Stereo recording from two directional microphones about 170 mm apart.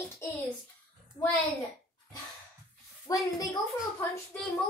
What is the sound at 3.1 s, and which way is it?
Speech, 20° left (ahead or behind).